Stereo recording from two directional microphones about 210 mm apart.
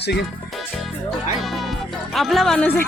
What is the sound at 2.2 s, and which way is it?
Speech, centre (ahead or behind).